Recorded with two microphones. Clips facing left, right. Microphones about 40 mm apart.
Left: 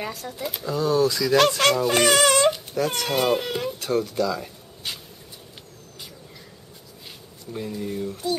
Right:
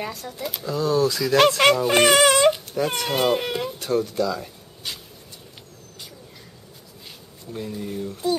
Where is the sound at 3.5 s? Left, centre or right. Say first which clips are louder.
Right 1 dB; centre.